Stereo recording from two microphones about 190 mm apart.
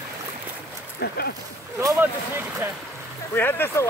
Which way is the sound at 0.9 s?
60° left (ahead or behind).